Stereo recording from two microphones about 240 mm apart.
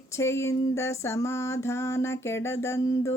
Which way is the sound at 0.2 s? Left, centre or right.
Centre.